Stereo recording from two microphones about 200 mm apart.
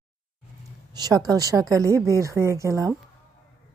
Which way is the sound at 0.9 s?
20° right (ahead or behind).